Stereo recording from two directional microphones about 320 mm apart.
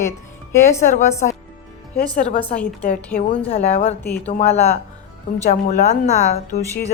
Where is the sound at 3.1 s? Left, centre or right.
Centre.